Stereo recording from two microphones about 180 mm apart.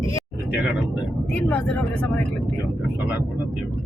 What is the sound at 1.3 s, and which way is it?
Speech, 5° left (ahead or behind).